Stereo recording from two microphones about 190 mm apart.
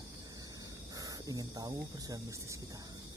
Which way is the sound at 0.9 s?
20° right (ahead or behind).